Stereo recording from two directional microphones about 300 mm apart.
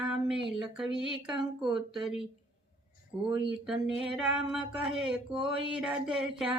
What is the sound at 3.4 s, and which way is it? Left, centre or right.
A woman's voice, centre.